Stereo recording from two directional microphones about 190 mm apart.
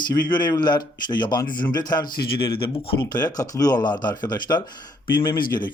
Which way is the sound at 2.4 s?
25° left (ahead or behind).